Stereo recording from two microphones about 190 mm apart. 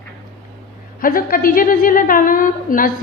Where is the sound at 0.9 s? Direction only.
50° left (ahead or behind).